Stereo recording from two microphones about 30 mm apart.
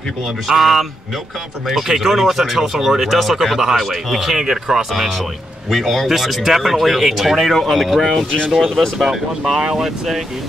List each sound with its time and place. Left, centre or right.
0.5 s speech: centre
5.7 s speech: centre
9.8 s speech: centre